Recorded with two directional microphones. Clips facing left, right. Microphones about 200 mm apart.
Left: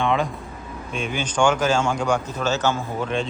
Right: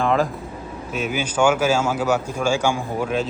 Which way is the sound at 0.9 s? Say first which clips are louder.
Right 2 dB; 5° right (ahead or behind).